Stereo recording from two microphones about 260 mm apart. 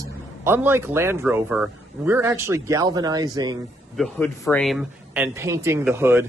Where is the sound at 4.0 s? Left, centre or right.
Centre.